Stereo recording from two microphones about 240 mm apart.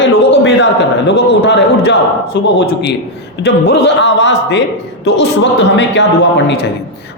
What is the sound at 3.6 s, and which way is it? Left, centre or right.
A man's voice, left.